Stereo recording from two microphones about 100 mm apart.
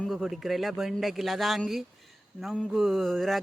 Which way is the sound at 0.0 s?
Centre (ahead or behind).